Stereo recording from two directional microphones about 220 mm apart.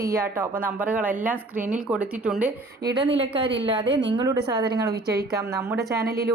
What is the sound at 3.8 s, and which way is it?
Speech, 55° right (ahead or behind).